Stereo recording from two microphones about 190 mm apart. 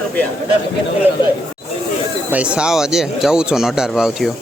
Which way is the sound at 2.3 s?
5° right (ahead or behind).